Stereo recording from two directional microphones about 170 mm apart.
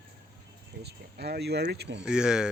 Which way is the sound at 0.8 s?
70° right (ahead or behind).